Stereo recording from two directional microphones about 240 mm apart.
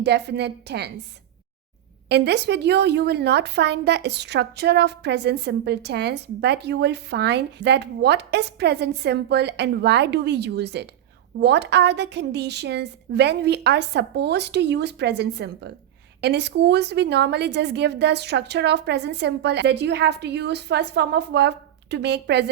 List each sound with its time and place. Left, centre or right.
0.0 s a woman's voice: right
2.0 s a woman's voice: right